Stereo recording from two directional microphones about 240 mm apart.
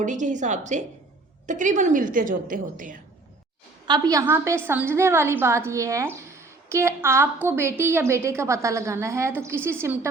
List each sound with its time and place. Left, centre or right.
0.0 s a woman's voice: right
3.8 s a woman's voice: centre